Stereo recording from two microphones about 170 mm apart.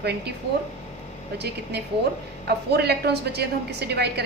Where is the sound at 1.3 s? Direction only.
75° right (ahead or behind).